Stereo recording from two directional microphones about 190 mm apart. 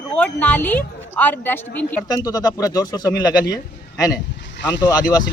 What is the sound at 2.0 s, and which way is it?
Speech, 20° left (ahead or behind).